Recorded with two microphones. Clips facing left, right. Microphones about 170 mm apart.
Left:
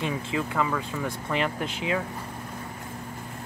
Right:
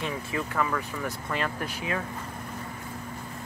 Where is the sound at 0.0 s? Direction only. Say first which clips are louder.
Left 3 dB; 15° left (ahead or behind).